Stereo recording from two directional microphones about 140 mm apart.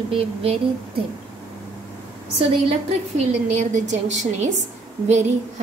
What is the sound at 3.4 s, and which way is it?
A woman's voice, 60° right (ahead or behind).